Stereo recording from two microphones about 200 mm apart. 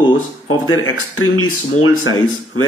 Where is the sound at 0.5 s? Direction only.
90° left.